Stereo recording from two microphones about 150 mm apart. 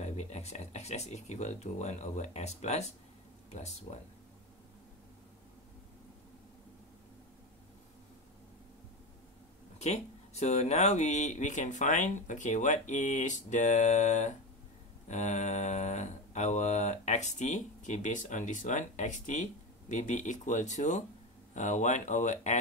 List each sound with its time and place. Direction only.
0.0 s speech: 50° left (ahead or behind)
9.8 s speech: 45° left (ahead or behind)